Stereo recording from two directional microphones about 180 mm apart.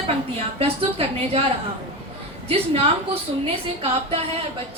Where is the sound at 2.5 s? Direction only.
35° right (ahead or behind).